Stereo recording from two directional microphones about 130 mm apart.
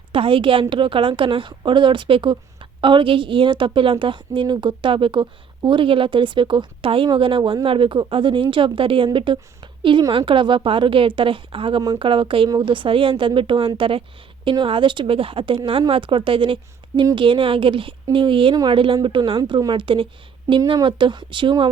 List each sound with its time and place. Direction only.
0.1 s a woman's voice: 40° right (ahead or behind)